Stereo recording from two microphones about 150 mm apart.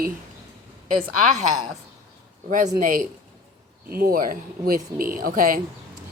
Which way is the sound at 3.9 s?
90° right.